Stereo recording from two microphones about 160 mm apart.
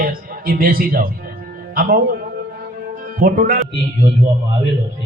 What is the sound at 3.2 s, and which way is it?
Speech, 60° right (ahead or behind).